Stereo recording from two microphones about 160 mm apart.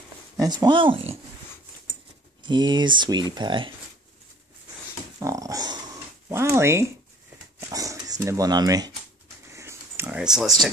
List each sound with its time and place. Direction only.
0.4 s speech: 25° right (ahead or behind)
2.4 s speech: 30° right (ahead or behind)
5.2 s dog: 20° right (ahead or behind)
6.2 s speech: 15° right (ahead or behind)
7.7 s dog: 20° right (ahead or behind)
9.5 s pig: 15° right (ahead or behind)
10.0 s a sound: 5° right (ahead or behind)